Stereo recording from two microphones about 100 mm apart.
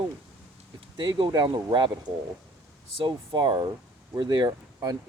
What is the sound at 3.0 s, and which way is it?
Speech, 50° right (ahead or behind).